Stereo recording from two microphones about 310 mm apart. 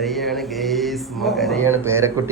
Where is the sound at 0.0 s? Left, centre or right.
Centre.